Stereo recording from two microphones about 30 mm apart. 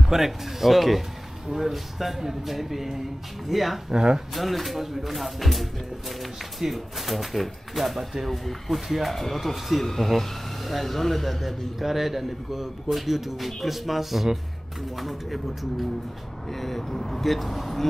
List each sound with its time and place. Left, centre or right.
0.1 s speech: centre
3.9 s speech: right
4.3 s speech: centre
8.8 s speech: centre
9.1 s speech: centre
17.2 s speech: centre